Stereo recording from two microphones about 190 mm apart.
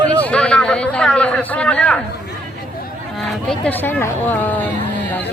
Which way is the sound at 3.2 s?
5° left (ahead or behind).